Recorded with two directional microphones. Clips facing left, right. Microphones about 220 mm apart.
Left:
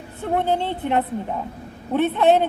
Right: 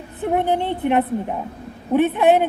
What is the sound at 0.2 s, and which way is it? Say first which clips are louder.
A woman's voice: right 2 dB; 15° right (ahead or behind).